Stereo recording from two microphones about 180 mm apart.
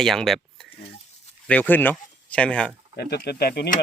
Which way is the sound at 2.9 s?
65° left (ahead or behind).